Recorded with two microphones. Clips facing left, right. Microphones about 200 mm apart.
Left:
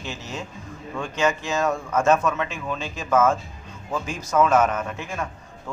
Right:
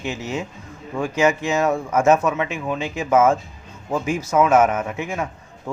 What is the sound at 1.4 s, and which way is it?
Speech, 20° right (ahead or behind).